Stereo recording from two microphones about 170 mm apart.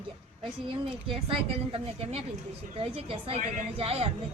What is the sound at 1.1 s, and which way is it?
A woman's voice, 30° right (ahead or behind).